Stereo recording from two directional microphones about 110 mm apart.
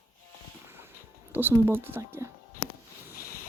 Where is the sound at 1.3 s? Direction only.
20° right (ahead or behind).